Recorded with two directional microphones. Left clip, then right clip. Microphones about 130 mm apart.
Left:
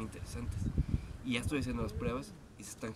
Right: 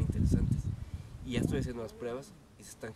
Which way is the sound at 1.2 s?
20° right (ahead or behind).